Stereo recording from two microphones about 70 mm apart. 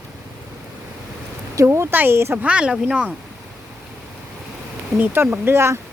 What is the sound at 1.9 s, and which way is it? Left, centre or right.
Speech, right.